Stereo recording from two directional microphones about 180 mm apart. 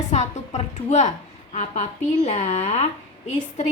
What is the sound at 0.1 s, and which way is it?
A woman's voice, 40° left (ahead or behind).